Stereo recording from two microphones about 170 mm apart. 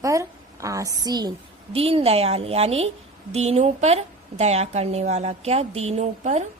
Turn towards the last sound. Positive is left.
turn(degrees=-40)  # may be behind; listen again after turning